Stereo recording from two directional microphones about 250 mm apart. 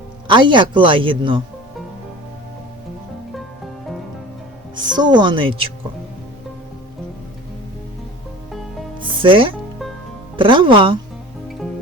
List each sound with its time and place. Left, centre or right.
0.3 s a man's voice: centre
4.7 s a woman's voice: centre
9.2 s a man's voice: right